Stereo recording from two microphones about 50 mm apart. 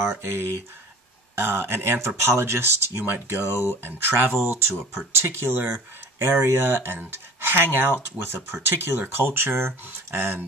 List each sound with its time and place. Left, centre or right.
0.0 s speech: right
4.5 s speech: right